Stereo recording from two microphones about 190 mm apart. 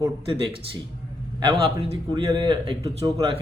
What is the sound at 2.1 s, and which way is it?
A man's voice, 25° right (ahead or behind).